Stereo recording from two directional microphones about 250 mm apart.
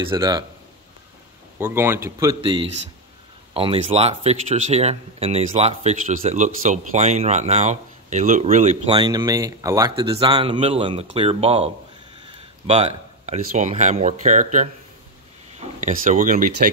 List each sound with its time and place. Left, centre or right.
0.1 s speech: centre
1.6 s speech: centre; by 14.7 s right
15.8 s speech: right